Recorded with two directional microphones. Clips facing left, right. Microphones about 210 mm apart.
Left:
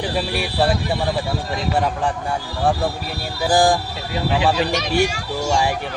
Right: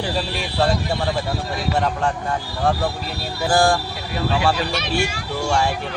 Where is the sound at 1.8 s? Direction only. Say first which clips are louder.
Even; 15° left (ahead or behind).